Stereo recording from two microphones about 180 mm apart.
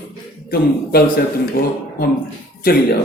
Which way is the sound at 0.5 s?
55° left (ahead or behind).